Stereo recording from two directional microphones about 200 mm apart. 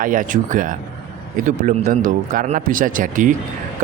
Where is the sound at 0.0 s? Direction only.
40° right (ahead or behind).